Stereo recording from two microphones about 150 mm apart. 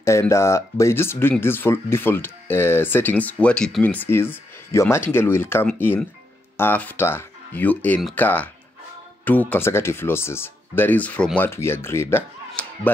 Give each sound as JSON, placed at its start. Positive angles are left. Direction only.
{"t": 0.0, "sound": "speech", "side_deg": 20}